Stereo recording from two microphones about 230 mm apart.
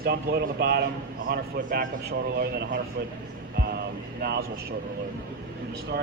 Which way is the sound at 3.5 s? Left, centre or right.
Right.